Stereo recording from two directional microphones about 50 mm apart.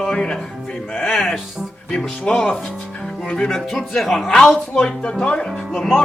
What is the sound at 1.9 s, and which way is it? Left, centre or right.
A man's voice, centre.